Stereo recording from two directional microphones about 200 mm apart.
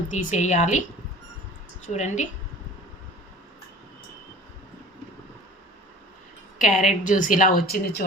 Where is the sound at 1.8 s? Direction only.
35° left (ahead or behind).